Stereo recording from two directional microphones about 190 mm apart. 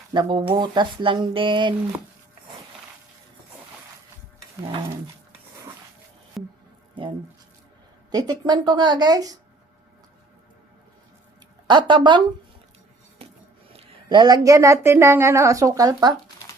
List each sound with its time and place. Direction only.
0.1 s speech: 25° right (ahead or behind)
6.4 s music: centre (ahead or behind)
8.1 s speech: 20° right (ahead or behind)
11.7 s speech: 25° right (ahead or behind)
13.7 s speech: 25° right (ahead or behind)